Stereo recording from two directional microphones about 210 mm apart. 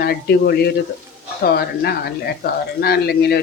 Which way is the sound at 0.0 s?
50° left (ahead or behind).